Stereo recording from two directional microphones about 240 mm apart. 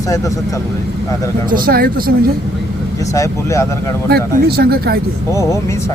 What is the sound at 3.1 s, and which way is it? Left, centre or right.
Speech, centre.